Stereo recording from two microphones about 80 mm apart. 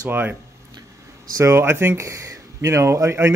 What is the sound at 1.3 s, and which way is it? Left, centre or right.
Speech, right.